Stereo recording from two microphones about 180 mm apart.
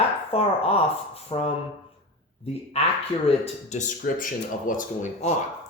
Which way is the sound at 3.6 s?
45° left (ahead or behind).